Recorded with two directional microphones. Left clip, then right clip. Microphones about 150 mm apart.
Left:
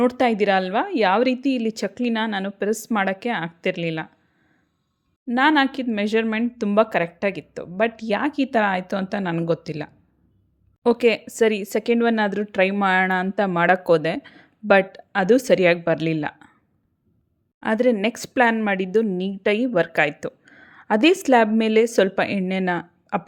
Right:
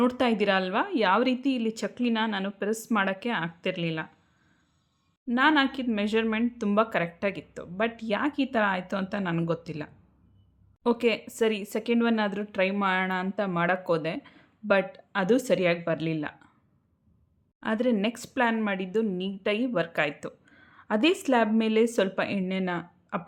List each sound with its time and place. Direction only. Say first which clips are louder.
0.0 s a woman's voice: left 6 dB; 30° left (ahead or behind)
5.3 s a woman's voice: left 5 dB; 40° left (ahead or behind)
6.4 s a woman's voice: left 4 dB; 25° left (ahead or behind)
6.7 s a woman's voice: left 7 dB; 35° left (ahead or behind)
17.6 s a woman's voice: left 7 dB; 45° left (ahead or behind)